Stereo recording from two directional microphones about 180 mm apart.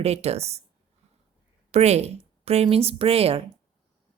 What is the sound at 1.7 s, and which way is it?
A woman's voice, 35° right (ahead or behind).